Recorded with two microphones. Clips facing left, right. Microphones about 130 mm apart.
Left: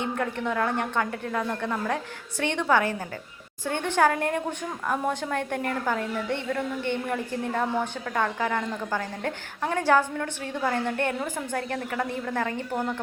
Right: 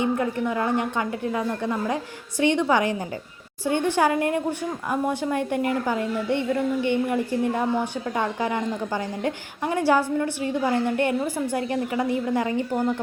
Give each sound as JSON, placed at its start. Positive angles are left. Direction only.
{"t": 0.0, "sound": "a woman's voice", "side_deg": -10}